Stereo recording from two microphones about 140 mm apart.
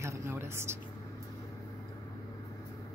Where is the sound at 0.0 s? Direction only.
20° right (ahead or behind).